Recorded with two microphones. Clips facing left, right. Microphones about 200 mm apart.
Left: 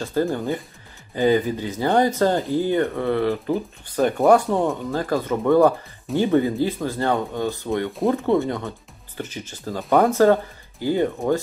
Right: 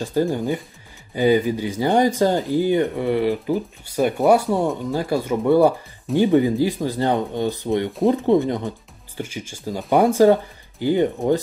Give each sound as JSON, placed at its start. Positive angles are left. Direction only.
{"t": 0.0, "sound": "speech", "side_deg": -15}